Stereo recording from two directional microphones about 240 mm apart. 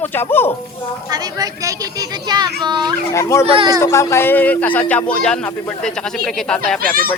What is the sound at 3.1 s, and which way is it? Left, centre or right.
Speech, centre.